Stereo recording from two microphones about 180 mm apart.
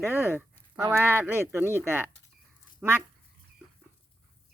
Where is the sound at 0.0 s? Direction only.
10° right (ahead or behind).